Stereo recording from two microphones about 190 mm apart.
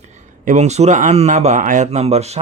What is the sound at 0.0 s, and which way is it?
Speech, 40° right (ahead or behind).